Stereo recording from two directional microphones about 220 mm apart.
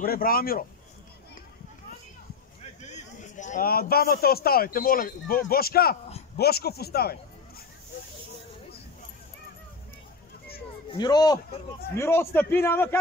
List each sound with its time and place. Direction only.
0.0 s speech: 40° left (ahead or behind)
2.6 s a man's voice: 30° left (ahead or behind)
10.9 s a man's voice: 20° left (ahead or behind)